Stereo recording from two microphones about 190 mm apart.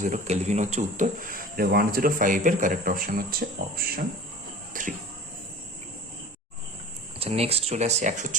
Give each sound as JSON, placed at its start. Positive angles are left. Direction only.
{"t": 0.0, "sound": "speech", "side_deg": -40}
{"t": 4.7, "sound": "a sound", "side_deg": -45}
{"t": 7.2, "sound": "speech", "side_deg": -30}